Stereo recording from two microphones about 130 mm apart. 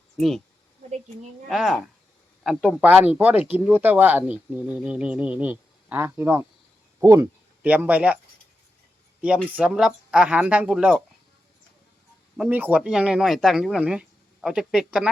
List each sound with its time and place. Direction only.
0.2 s speech: centre (ahead or behind)
0.9 s a woman's voice: 65° right (ahead or behind)
1.5 s speech: centre (ahead or behind); by 7.3 s 25° right (ahead or behind)
7.6 s speech: 10° right (ahead or behind)
9.2 s speech: 10° right (ahead or behind)
12.4 s speech: 15° right (ahead or behind)